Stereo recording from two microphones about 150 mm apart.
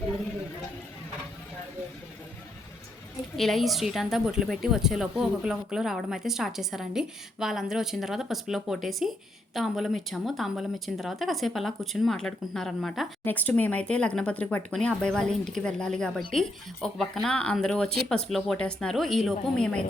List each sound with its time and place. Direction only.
3.3 s speech: centre (ahead or behind)